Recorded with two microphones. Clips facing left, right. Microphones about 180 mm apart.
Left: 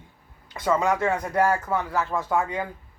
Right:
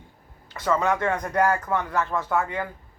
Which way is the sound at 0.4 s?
15° left (ahead or behind).